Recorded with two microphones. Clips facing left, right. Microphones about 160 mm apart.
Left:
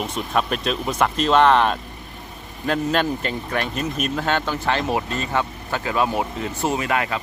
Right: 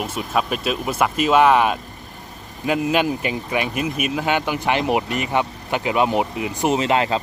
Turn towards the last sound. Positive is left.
turn(degrees=-25)  # may be behind; listen again after turning